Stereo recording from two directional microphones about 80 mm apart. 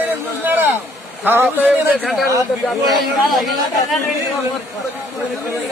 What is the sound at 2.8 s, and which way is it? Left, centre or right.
Speech, centre.